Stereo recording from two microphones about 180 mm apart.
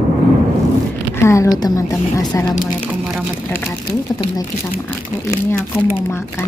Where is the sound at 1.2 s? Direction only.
20° left (ahead or behind).